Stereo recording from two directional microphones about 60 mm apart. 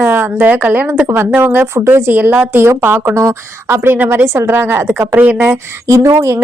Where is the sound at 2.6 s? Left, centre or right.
Right.